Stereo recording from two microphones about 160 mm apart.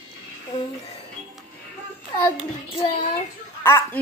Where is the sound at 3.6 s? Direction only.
15° left (ahead or behind).